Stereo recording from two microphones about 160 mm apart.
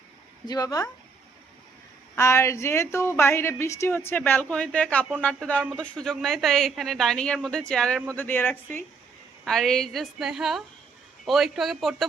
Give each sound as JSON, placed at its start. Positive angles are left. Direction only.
{"t": 0.4, "sound": "speech", "side_deg": 25}
{"t": 2.1, "sound": "a woman's voice", "side_deg": 20}
{"t": 9.4, "sound": "speech", "side_deg": 0}